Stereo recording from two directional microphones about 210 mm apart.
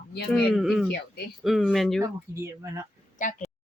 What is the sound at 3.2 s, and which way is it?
Speech, 35° left (ahead or behind).